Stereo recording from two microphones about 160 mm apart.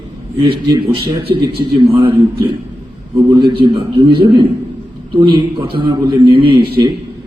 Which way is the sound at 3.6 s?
35° right (ahead or behind).